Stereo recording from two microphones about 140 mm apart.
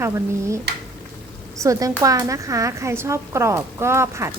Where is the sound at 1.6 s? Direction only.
25° right (ahead or behind).